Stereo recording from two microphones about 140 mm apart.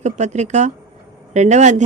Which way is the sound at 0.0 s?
55° right (ahead or behind).